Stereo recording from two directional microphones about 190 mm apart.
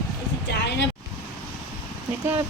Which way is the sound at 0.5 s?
65° left (ahead or behind).